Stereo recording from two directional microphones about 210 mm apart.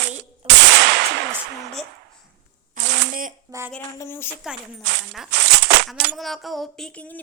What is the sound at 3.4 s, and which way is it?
Speech, 15° right (ahead or behind).